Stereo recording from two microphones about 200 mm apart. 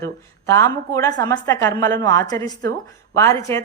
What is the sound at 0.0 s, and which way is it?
A woman's voice, 15° left (ahead or behind).